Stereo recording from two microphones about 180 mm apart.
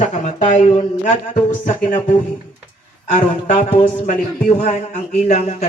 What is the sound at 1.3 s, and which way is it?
Speech, 45° left (ahead or behind).